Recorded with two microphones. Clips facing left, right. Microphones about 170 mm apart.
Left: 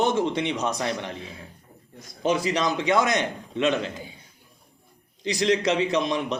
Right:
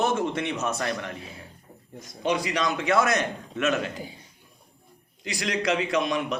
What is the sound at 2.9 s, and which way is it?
A man's voice, 15° left (ahead or behind).